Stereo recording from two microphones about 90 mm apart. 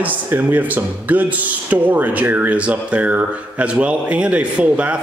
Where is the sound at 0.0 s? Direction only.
20° right (ahead or behind).